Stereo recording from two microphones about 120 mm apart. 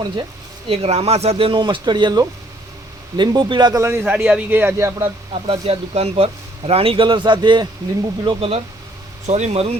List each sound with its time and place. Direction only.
0.7 s speech: 55° right (ahead or behind); by 3.8 s 40° right (ahead or behind)
3.8 s a man's voice: 20° right (ahead or behind)
5.3 s speech: 55° right (ahead or behind)
9.2 s speech: 70° right (ahead or behind)